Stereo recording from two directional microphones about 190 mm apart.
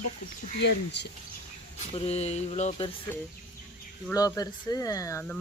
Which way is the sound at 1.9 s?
30° left (ahead or behind).